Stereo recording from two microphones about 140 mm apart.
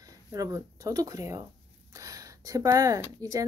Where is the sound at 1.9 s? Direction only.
25° right (ahead or behind).